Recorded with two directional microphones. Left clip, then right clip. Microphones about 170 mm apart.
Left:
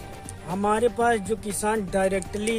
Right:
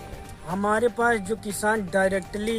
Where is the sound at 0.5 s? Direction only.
20° left (ahead or behind).